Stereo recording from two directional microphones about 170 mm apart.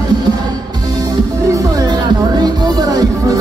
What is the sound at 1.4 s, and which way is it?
Music, 20° right (ahead or behind).